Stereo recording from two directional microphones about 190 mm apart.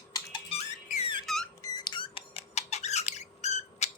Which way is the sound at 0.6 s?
35° left (ahead or behind).